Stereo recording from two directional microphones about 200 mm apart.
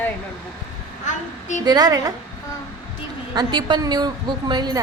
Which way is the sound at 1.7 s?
20° right (ahead or behind).